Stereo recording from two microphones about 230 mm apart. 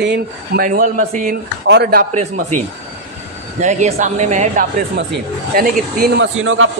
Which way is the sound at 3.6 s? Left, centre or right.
Right.